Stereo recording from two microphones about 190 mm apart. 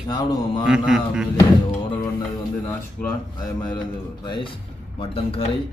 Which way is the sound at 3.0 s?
20° left (ahead or behind).